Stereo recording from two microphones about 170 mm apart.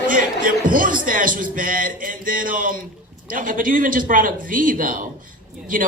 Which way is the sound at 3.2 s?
50° right (ahead or behind).